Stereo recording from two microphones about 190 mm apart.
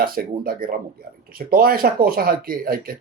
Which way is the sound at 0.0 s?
50° right (ahead or behind).